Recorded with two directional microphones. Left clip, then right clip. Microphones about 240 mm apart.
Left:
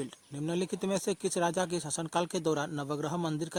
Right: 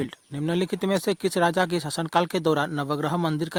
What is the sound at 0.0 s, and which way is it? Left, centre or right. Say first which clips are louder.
Speech: right 8 dB; right.